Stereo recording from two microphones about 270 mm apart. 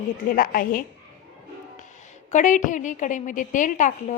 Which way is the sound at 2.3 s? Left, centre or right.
Left.